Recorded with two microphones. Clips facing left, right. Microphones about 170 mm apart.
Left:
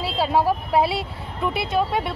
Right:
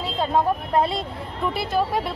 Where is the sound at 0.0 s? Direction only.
10° left (ahead or behind).